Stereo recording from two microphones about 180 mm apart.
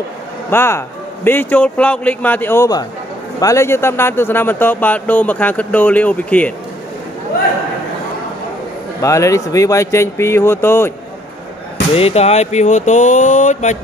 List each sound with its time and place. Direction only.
0.5 s speech: 15° left (ahead or behind)
9.0 s speech: 15° left (ahead or behind)
11.9 s speech: 35° left (ahead or behind)